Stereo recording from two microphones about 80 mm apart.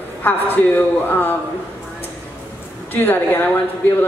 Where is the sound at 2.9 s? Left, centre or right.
Left.